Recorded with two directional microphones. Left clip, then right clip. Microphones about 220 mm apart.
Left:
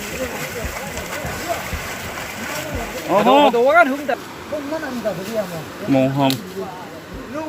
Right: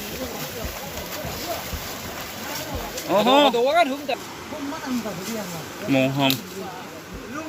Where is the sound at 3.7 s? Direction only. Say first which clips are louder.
Left 6 dB; 30° left (ahead or behind).